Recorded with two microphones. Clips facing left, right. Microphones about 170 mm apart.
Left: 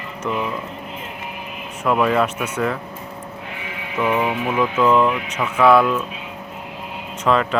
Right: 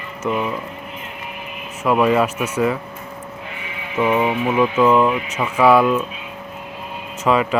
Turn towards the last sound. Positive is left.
turn(degrees=-10)  # may be behind; listen again after turning